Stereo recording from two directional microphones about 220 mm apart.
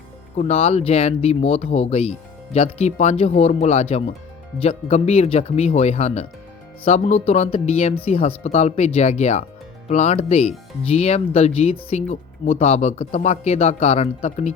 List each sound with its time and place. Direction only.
0.3 s speech: 30° left (ahead or behind)